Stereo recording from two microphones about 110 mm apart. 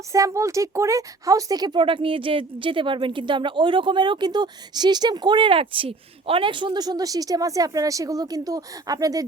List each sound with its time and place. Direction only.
0.1 s a woman's voice: 30° right (ahead or behind)